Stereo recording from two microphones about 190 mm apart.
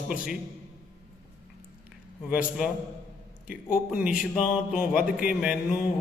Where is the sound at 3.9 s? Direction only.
5° right (ahead or behind).